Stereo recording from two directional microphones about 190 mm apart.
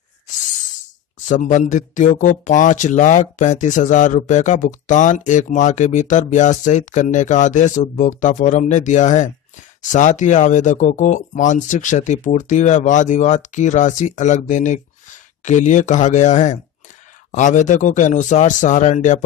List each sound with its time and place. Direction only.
1.2 s speech: 40° left (ahead or behind)